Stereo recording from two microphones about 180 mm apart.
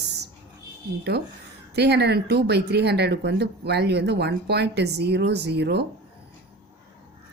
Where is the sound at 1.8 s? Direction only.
65° right (ahead or behind).